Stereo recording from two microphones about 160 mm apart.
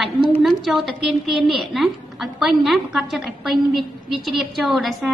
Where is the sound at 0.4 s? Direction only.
Centre (ahead or behind).